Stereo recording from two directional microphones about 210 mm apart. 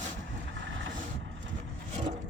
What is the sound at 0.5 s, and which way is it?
Vehicle, 65° right (ahead or behind).